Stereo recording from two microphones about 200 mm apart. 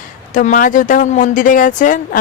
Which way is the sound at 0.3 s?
40° left (ahead or behind).